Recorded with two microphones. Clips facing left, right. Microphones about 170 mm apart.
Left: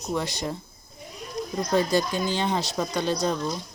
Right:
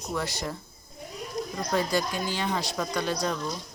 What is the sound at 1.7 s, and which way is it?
Speech, 25° left (ahead or behind).